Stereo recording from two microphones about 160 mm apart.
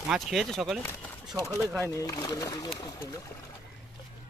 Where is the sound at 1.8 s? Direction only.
20° left (ahead or behind).